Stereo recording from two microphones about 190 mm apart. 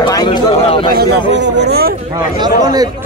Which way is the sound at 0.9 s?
55° right (ahead or behind).